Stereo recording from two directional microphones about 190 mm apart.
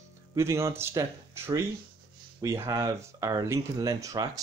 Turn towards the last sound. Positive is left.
turn(degrees=-15)  # may be behind; listen again after turning